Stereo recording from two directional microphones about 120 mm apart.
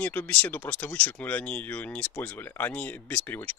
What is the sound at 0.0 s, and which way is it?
Speech, 15° left (ahead or behind).